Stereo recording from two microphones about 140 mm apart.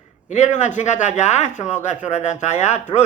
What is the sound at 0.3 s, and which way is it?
Speech, 60° left (ahead or behind).